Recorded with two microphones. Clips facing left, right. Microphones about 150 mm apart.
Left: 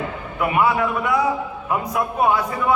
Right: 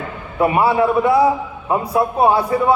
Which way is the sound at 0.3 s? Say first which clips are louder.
Right 4 dB; 30° right (ahead or behind).